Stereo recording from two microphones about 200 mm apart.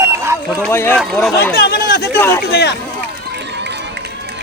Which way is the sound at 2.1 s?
10° left (ahead or behind).